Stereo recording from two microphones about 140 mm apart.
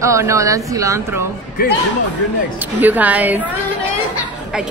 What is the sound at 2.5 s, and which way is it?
Speech, 10° right (ahead or behind).